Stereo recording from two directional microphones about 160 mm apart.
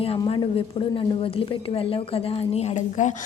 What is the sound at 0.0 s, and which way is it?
A woman's voice, 35° left (ahead or behind).